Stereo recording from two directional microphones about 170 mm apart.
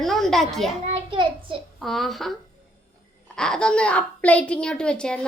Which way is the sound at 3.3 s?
5° left (ahead or behind).